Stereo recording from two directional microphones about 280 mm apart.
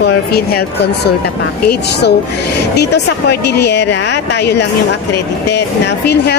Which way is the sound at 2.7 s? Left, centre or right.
Left.